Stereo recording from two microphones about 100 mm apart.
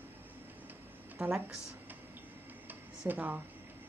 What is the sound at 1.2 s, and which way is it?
Speech, 10° right (ahead or behind).